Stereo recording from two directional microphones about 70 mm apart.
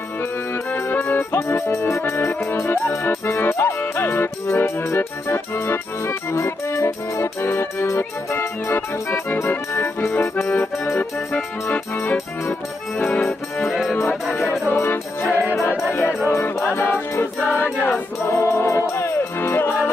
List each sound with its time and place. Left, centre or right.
0.7 s music: left
10.5 s accordion: left
11.7 s music: left
13.7 s music: centre
14.7 s music: left
18.3 s music: left